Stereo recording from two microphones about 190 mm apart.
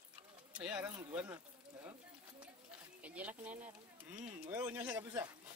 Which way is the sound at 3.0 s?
5° right (ahead or behind).